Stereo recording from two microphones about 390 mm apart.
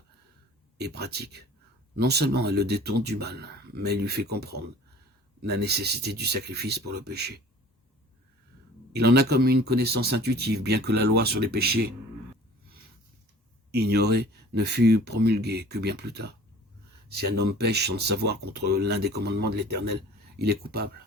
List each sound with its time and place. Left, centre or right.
0.8 s speech: right
8.9 s speech: right
13.7 s speech: right